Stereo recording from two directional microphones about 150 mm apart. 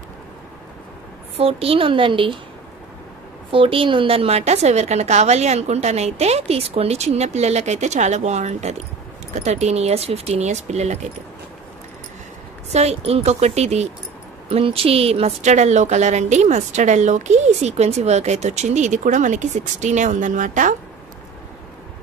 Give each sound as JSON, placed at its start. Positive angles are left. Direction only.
{"t": 1.3, "sound": "a woman's voice", "side_deg": -40}
{"t": 3.5, "sound": "a woman's voice", "side_deg": -35}
{"t": 12.7, "sound": "a woman's voice", "side_deg": -45}